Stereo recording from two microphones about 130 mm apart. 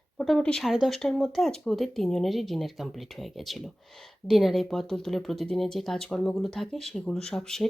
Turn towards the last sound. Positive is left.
turn(degrees=5)  # may be behind; listen again after turning